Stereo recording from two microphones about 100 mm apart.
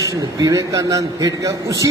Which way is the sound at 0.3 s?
40° right (ahead or behind).